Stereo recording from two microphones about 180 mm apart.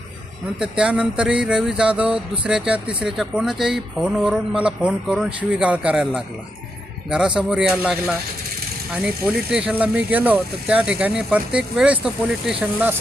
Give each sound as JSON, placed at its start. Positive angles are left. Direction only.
{"t": 0.6, "sound": "speech", "side_deg": -5}